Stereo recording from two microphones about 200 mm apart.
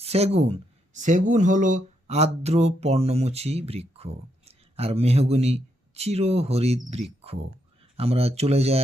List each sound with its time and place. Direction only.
0.0 s speech: 30° right (ahead or behind)